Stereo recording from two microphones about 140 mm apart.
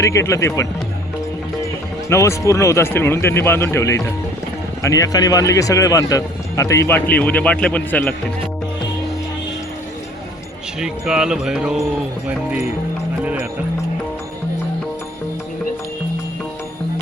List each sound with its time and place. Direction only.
0.0 s speech: 20° left (ahead or behind)
2.0 s speech: 20° left (ahead or behind)
10.8 s jingle bell: 5° right (ahead or behind)
13.2 s speech: 10° right (ahead or behind)